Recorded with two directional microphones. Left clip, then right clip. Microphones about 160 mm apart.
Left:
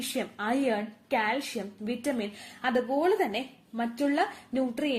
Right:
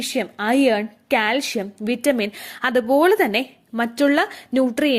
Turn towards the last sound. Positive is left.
turn(degrees=-55)  # may be behind; listen again after turning